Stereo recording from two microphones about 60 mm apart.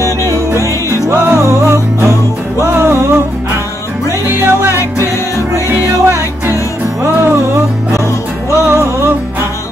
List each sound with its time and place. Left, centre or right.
0.6 s music: left
1.1 s music: right
4.3 s music: right
5.7 s music: right
8.6 s music: right